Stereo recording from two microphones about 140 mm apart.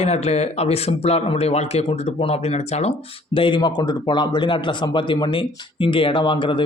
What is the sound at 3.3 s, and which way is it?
A man's voice, 35° left (ahead or behind).